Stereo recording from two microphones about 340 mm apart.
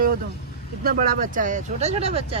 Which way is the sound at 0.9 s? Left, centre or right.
Right.